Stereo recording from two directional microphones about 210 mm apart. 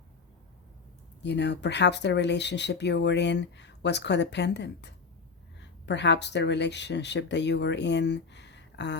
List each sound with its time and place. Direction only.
1.2 s speech: 55° left (ahead or behind)